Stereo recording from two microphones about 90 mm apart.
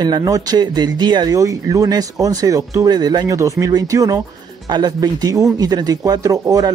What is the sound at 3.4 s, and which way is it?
Speech, 35° right (ahead or behind).